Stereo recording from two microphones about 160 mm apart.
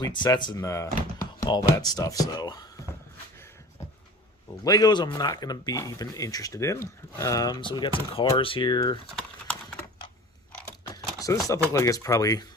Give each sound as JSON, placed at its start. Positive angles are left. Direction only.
{"t": 0.0, "sound": "speech", "side_deg": 25}
{"t": 4.6, "sound": "speech", "side_deg": 20}
{"t": 11.2, "sound": "speech", "side_deg": 20}